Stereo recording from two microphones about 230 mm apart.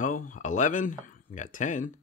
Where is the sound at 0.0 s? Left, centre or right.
Left.